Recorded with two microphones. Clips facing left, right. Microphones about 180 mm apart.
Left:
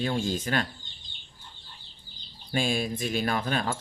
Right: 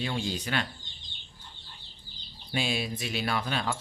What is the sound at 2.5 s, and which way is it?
Speech, 50° left (ahead or behind).